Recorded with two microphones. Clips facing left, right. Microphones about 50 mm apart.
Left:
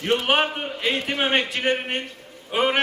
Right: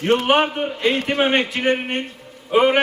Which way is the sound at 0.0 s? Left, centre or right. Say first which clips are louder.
Right 5 dB; right.